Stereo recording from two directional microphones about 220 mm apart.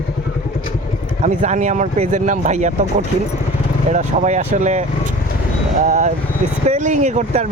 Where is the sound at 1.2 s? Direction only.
35° right (ahead or behind).